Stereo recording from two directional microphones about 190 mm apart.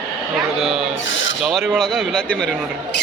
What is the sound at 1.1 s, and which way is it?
Filing, 85° left.